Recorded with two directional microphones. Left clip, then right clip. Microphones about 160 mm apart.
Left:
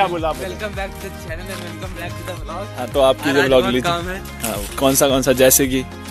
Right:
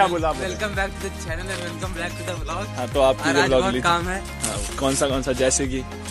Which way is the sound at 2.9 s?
45° left (ahead or behind).